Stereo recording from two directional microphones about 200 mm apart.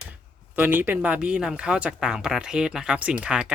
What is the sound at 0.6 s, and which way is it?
Speech, 10° right (ahead or behind).